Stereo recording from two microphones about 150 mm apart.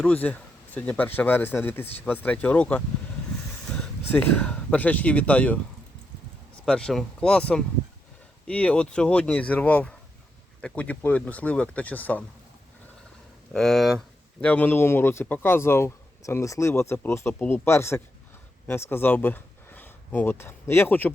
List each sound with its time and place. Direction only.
0.0 s speech: 10° left (ahead or behind)
6.7 s speech: 5° left (ahead or behind)
13.5 s speech: 5° left (ahead or behind)